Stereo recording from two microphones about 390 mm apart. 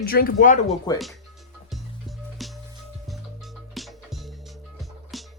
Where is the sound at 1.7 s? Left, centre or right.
Centre.